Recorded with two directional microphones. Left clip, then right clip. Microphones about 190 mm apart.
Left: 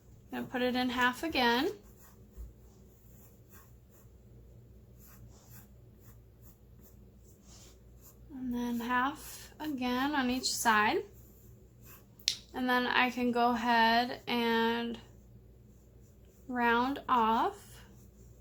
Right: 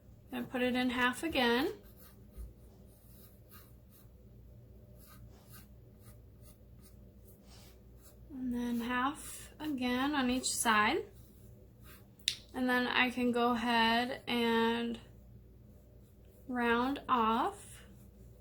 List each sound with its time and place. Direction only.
0.3 s speech: 20° left (ahead or behind)
8.4 s speech: 20° left (ahead or behind)
12.2 s speech: 20° left (ahead or behind)
16.5 s speech: 20° left (ahead or behind)